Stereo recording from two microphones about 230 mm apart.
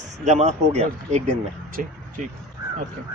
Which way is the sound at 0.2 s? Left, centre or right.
Right.